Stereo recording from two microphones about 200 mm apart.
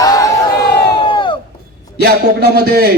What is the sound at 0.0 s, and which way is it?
Crowd, 15° left (ahead or behind).